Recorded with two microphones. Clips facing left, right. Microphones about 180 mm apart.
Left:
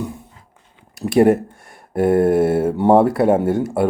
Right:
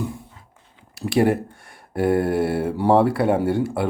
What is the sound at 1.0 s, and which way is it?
Speech, 45° left (ahead or behind).